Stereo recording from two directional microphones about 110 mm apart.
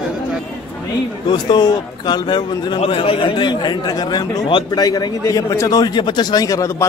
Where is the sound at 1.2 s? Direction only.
40° left (ahead or behind).